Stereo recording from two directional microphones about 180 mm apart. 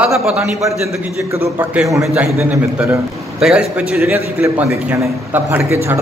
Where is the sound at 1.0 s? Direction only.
10° right (ahead or behind).